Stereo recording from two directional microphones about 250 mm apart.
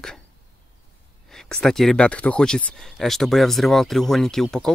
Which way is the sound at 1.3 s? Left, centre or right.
Centre.